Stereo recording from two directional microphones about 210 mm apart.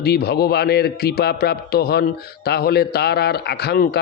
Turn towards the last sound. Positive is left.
turn(degrees=50)  # may be behind; listen again after turning